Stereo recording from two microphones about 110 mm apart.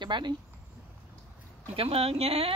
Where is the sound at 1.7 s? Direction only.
60° right (ahead or behind).